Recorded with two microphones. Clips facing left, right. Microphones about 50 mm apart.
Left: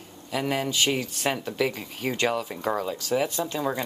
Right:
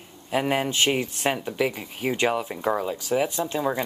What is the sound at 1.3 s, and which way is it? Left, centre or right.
Speech, centre.